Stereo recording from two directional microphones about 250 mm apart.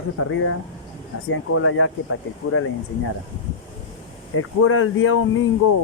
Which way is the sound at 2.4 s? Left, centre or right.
Left.